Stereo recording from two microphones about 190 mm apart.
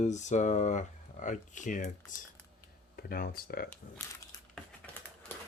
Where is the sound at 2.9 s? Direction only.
50° left (ahead or behind).